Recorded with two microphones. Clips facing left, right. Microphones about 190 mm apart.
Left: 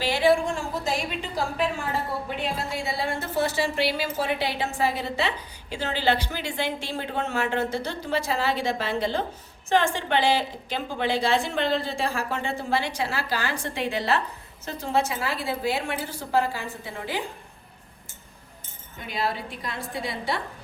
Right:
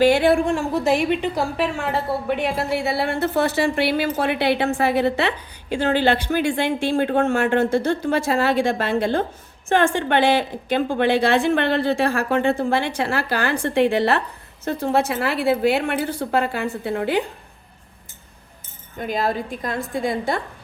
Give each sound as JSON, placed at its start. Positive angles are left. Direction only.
{"t": 0.0, "sound": "a woman's voice", "side_deg": -60}
{"t": 18.9, "sound": "a woman's voice", "side_deg": -45}